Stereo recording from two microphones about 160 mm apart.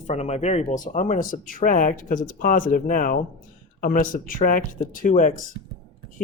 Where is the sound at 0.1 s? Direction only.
45° left (ahead or behind).